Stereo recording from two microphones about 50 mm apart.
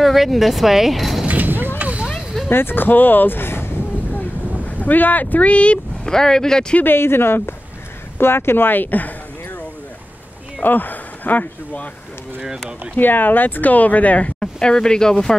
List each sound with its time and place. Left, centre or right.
0.0 s speech: centre
1.2 s clip-clop: right
1.8 s a sound: right
2.5 s a sound: left
4.6 s speech: left
6.0 s speech: centre
6.8 s speech: left
10.6 s speech: left
12.9 s speech: left
14.4 s speech: centre